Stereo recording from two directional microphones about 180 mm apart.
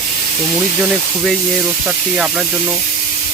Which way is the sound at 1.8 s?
5° right (ahead or behind).